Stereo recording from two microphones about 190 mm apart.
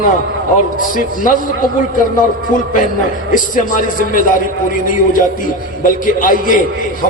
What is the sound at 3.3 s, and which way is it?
A man's voice, 45° left (ahead or behind).